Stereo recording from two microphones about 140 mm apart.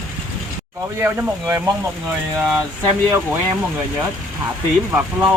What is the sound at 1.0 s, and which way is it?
Speech, 15° right (ahead or behind).